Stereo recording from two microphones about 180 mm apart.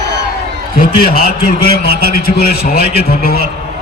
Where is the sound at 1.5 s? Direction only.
60° left (ahead or behind).